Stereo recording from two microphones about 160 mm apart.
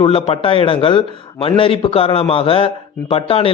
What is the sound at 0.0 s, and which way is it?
A man's voice, 35° left (ahead or behind).